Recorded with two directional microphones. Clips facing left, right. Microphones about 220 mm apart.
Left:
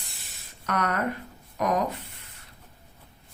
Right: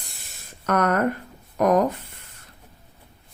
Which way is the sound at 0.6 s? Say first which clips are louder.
Right 7 dB; 50° right (ahead or behind).